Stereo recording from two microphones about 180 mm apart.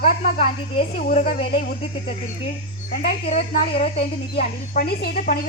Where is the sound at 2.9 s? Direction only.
35° left (ahead or behind).